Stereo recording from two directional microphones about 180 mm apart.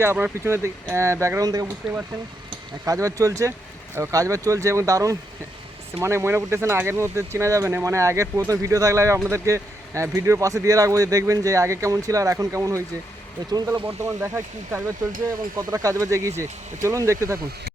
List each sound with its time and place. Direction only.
0.0 s speech: 15° right (ahead or behind)
13.8 s speech: 10° right (ahead or behind)